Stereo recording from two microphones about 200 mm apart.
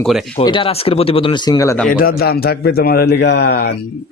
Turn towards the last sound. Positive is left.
turn(degrees=55)  # may be behind; listen again after turning